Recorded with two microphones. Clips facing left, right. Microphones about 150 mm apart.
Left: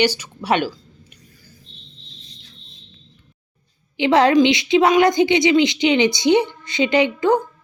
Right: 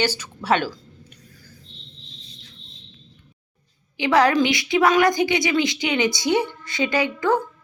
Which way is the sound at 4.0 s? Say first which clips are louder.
Left 4 dB; 25° left (ahead or behind).